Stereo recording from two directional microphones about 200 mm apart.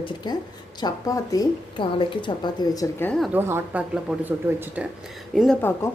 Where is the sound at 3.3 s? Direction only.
10° right (ahead or behind).